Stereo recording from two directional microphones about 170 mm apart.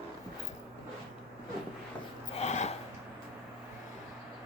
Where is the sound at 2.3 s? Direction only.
40° left (ahead or behind).